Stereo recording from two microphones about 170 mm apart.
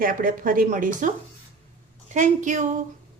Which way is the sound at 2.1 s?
45° right (ahead or behind).